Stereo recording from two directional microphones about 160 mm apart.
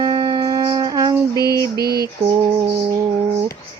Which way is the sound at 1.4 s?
25° left (ahead or behind).